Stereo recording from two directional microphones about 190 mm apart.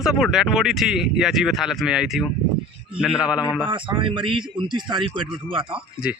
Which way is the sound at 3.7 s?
25° right (ahead or behind).